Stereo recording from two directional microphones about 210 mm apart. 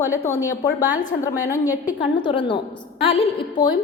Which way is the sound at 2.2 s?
20° left (ahead or behind).